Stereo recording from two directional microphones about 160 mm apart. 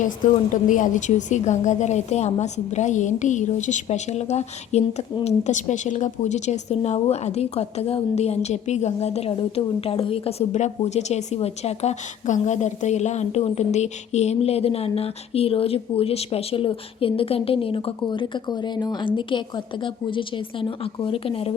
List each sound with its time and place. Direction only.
0.5 s a woman's voice: 55° left (ahead or behind); by 21.5 s 35° left (ahead or behind)